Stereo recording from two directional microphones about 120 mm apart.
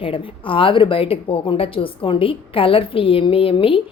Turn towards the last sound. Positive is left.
turn(degrees=50)  # may be behind; listen again after turning